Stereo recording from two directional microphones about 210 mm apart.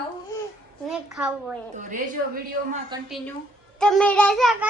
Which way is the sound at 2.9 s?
20° right (ahead or behind).